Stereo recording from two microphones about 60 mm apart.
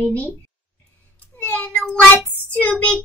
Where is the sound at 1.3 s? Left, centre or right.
Left.